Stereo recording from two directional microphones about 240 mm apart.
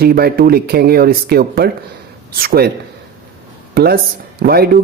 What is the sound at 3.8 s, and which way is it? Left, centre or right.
Speech, right.